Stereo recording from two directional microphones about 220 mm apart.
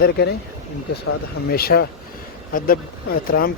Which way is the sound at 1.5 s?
45° left (ahead or behind).